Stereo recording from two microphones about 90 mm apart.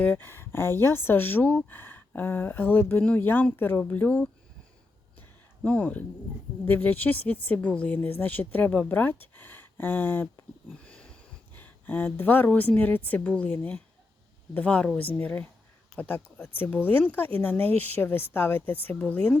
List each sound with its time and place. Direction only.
0.0 s speech: 20° left (ahead or behind)
5.6 s a woman's voice: 15° left (ahead or behind)
10.8 s a sound: 10° left (ahead or behind)
12.5 s a woman's voice: 15° left (ahead or behind)